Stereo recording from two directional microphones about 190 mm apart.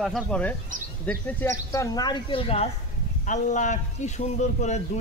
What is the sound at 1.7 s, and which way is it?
A man's voice, 20° left (ahead or behind).